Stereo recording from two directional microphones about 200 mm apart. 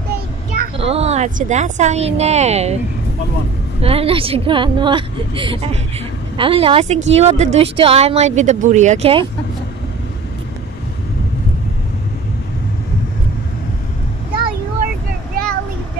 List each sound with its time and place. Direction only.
0.7 s speech: 30° right (ahead or behind)
3.8 s a woman's voice: 30° right (ahead or behind)
15.4 s a sound: 50° right (ahead or behind)